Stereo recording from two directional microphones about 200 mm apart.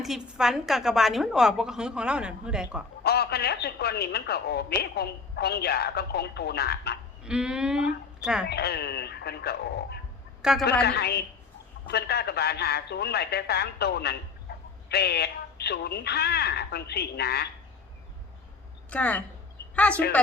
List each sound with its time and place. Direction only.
0.0 s a woman's voice: centre (ahead or behind)
3.0 s speech: 55° left (ahead or behind)
7.3 s a woman's voice: 5° right (ahead or behind)
8.4 s speech: 55° left (ahead or behind)
18.9 s speech: 5° left (ahead or behind)